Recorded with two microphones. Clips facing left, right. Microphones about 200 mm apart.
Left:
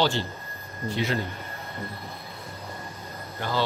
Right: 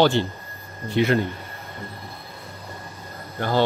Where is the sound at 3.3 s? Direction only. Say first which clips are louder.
Right 6 dB; 50° right (ahead or behind).